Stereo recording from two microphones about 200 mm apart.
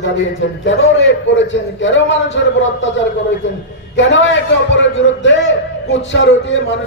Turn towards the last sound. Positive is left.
turn(degrees=65)  # may be behind; listen again after turning